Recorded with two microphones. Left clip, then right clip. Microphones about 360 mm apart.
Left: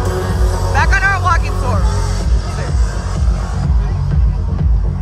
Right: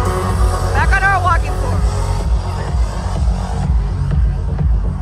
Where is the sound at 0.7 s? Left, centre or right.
Centre.